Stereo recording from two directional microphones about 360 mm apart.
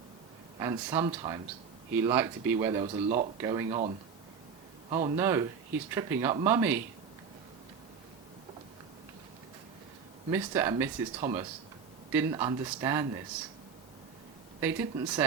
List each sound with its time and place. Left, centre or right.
0.6 s speech: centre
10.2 s speech: centre
14.6 s speech: centre